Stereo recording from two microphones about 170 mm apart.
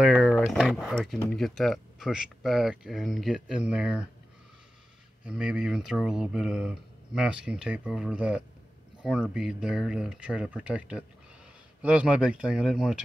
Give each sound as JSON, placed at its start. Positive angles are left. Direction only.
{"t": 0.0, "sound": "a sound", "side_deg": 0}
{"t": 1.3, "sound": "speech", "side_deg": 0}
{"t": 5.2, "sound": "speech", "side_deg": -5}